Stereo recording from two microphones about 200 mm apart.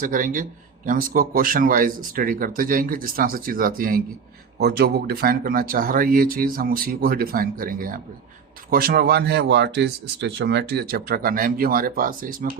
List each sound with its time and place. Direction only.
0.0 s a man's voice: 40° right (ahead or behind)